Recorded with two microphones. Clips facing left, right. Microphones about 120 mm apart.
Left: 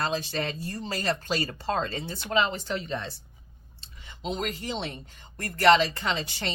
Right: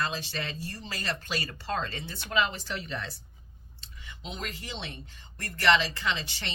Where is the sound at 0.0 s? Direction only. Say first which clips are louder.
Left 4 dB; 40° left (ahead or behind).